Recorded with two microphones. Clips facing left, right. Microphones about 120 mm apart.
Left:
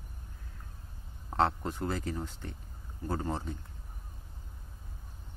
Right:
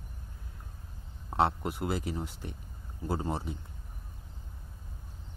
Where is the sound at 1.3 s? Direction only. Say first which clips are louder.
Right 1 dB; 10° right (ahead or behind).